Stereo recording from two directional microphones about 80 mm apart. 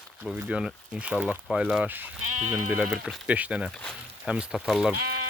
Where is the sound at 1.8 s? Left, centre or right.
Right.